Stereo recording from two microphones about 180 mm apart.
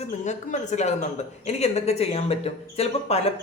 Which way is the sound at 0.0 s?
40° left (ahead or behind).